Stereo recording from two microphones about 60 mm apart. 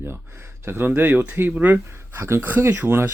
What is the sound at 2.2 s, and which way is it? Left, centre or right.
Speech, right.